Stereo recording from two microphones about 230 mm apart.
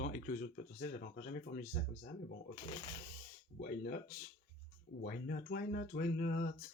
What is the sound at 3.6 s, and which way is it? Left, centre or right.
Speech, left.